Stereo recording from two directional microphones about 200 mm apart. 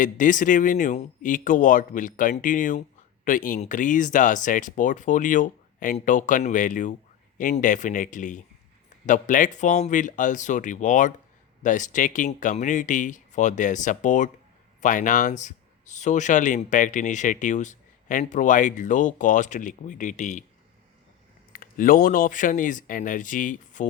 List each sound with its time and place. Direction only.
0.0 s speech: 40° left (ahead or behind)
21.5 s speech: 45° left (ahead or behind)